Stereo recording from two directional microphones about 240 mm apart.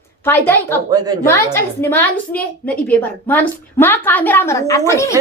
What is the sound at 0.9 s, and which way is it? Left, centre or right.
Speech, centre.